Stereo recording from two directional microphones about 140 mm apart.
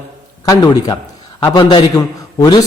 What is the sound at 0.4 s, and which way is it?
A man's voice, 25° left (ahead or behind).